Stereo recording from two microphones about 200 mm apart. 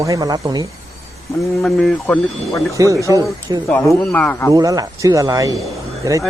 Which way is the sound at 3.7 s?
5° left (ahead or behind).